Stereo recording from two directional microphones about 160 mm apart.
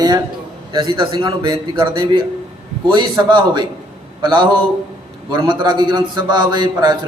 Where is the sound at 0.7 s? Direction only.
25° right (ahead or behind).